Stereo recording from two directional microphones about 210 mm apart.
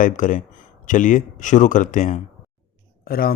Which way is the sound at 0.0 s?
40° left (ahead or behind).